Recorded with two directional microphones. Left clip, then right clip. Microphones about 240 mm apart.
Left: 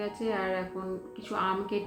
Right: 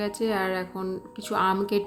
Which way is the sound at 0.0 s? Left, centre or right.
Right.